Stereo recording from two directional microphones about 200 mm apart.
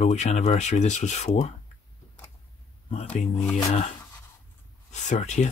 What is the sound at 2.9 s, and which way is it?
Speech, 35° left (ahead or behind).